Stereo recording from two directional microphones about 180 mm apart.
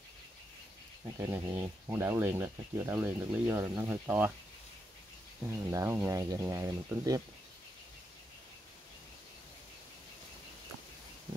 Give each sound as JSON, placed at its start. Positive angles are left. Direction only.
{"t": 1.0, "sound": "speech", "side_deg": -20}
{"t": 5.5, "sound": "speech", "side_deg": -15}